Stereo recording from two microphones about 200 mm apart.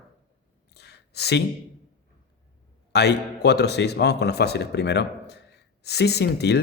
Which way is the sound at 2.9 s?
55° left (ahead or behind).